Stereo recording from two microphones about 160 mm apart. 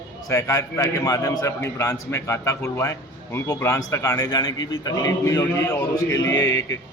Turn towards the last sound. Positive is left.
turn(degrees=20)  # may be behind; listen again after turning